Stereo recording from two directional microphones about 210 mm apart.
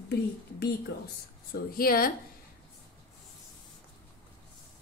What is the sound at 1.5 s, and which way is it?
Speech, 45° left (ahead or behind).